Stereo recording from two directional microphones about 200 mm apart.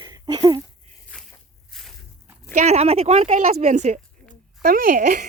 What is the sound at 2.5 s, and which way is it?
Speech, 35° right (ahead or behind).